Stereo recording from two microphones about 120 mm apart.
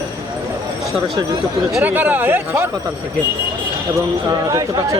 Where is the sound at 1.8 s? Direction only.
15° right (ahead or behind).